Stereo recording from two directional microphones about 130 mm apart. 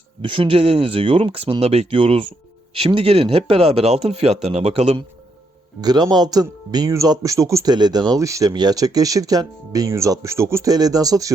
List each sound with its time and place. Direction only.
0.2 s speech: 40° right (ahead or behind)
5.8 s speech: 30° right (ahead or behind)